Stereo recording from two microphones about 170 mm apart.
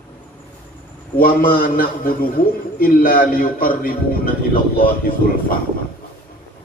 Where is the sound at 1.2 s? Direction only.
60° left (ahead or behind).